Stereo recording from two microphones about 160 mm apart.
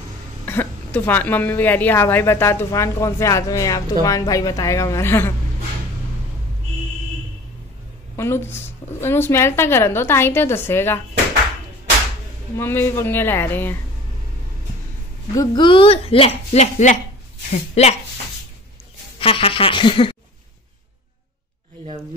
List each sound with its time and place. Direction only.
0.5 s a woman's voice: 15° left (ahead or behind)
8.2 s a woman's voice: 15° left (ahead or behind)
12.5 s a woman's voice: 15° left (ahead or behind)
15.3 s a woman's voice: 30° left (ahead or behind)
19.1 s a sound: 35° left (ahead or behind)